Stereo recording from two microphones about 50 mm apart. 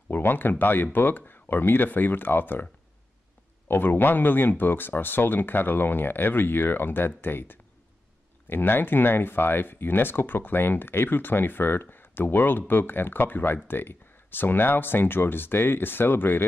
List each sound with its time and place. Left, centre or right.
0.1 s speech: left